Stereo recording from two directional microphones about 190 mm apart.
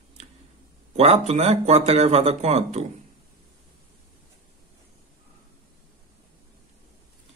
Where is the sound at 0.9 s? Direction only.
35° right (ahead or behind).